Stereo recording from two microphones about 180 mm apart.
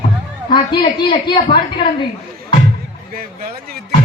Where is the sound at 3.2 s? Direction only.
55° right (ahead or behind).